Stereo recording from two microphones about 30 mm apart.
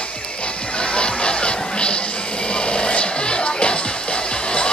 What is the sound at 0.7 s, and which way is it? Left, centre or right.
Music, left.